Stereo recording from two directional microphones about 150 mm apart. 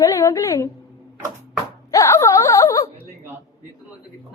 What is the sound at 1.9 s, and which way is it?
Speech, 20° left (ahead or behind).